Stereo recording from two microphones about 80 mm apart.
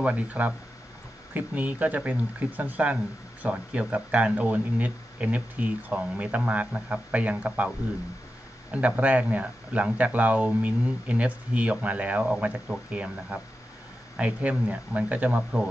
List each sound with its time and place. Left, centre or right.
0.0 s speech: centre
8.7 s speech: centre